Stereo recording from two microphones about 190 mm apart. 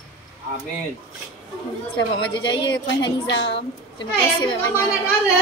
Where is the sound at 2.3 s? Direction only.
25° left (ahead or behind).